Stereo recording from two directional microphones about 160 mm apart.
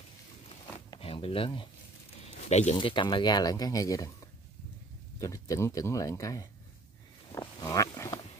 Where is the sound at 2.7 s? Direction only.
30° left (ahead or behind).